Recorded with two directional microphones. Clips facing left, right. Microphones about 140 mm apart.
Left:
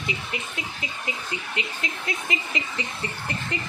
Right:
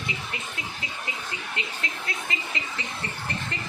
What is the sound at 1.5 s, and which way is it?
Speech, 15° left (ahead or behind).